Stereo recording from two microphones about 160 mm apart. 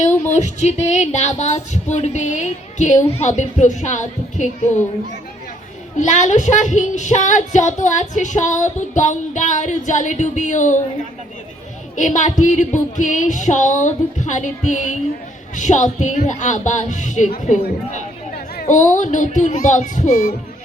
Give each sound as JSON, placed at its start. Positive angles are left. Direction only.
{"t": 0.3, "sound": "speech", "side_deg": 50}
{"t": 6.0, "sound": "speech", "side_deg": 50}
{"t": 11.9, "sound": "speech", "side_deg": 50}
{"t": 18.3, "sound": "speech", "side_deg": 65}